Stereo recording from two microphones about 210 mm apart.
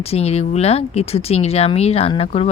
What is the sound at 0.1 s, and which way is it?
Speech, 30° left (ahead or behind).